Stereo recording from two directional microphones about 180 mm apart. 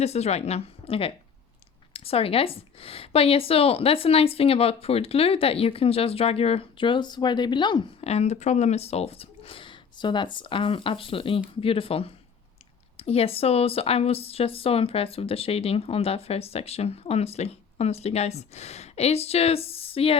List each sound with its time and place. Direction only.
0.0 s speech: 35° left (ahead or behind)